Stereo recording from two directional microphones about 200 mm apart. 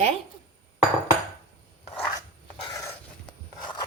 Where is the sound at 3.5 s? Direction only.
20° left (ahead or behind).